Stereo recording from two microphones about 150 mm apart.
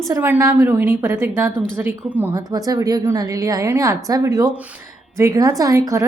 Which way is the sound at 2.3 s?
25° right (ahead or behind).